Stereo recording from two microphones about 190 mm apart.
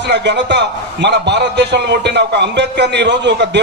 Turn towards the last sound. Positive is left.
turn(degrees=-65)  # may be behind; listen again after turning